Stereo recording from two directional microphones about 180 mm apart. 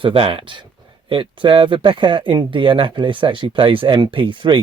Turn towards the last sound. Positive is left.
turn(degrees=-30)  # may be behind; listen again after turning